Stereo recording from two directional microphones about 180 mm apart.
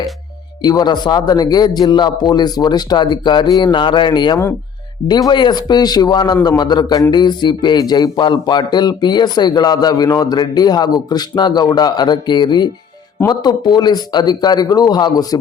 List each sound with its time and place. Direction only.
0.6 s a man's voice: 20° left (ahead or behind)